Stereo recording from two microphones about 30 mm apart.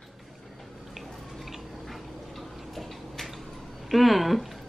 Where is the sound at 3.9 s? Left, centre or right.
Centre.